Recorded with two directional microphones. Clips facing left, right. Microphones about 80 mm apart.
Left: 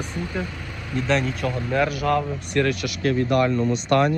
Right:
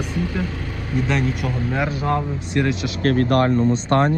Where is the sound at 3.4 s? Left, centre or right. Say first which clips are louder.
Right 3 dB; right.